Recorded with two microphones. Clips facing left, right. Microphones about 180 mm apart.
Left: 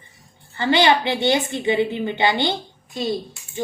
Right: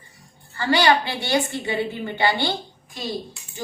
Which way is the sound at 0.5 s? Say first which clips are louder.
Left 2 dB; 20° left (ahead or behind).